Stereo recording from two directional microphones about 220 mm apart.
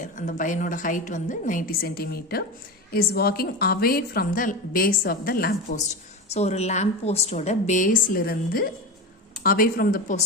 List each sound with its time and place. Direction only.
0.0 s a woman's voice: 35° left (ahead or behind)